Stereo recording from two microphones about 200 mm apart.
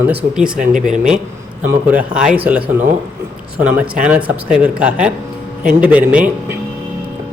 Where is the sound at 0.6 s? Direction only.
40° right (ahead or behind).